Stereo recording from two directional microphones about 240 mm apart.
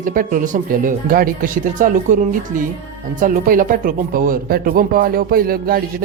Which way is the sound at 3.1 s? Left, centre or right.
Right.